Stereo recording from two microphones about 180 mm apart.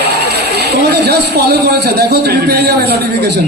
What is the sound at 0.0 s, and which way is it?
A man's voice, 65° right (ahead or behind).